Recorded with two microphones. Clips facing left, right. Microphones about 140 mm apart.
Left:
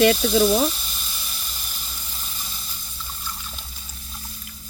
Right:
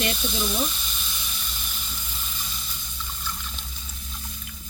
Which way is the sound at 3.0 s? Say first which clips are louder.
Even; 5° left (ahead or behind).